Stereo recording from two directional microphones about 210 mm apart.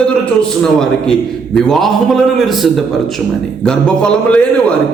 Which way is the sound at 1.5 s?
Centre (ahead or behind).